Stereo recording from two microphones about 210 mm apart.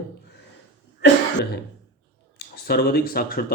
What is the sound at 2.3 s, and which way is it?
Speech, 45° left (ahead or behind).